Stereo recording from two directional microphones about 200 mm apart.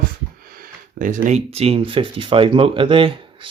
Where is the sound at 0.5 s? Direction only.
45° right (ahead or behind).